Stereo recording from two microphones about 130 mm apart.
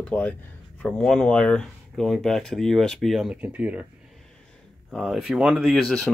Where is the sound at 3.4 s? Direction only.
10° right (ahead or behind).